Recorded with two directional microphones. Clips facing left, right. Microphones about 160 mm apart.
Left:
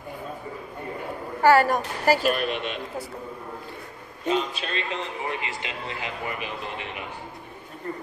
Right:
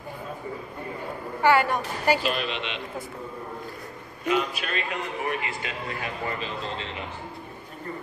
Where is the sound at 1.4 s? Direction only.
40° left (ahead or behind).